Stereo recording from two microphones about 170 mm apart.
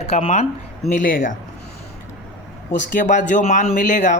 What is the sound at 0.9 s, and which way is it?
Speech, 50° left (ahead or behind).